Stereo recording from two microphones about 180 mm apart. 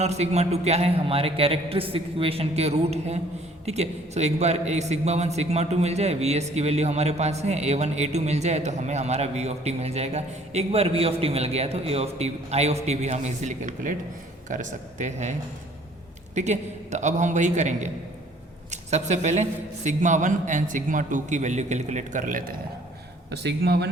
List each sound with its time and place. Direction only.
0.0 s a man's voice: 35° right (ahead or behind)
23.3 s speech: 65° right (ahead or behind)